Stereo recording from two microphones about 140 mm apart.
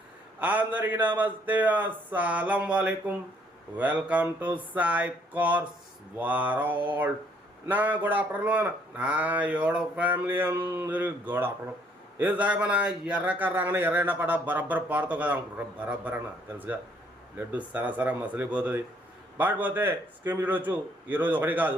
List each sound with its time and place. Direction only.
0.3 s speech: 10° right (ahead or behind)
17.3 s speech: 10° right (ahead or behind)